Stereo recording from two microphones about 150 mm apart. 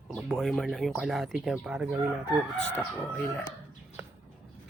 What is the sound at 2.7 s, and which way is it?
Speech, 10° left (ahead or behind).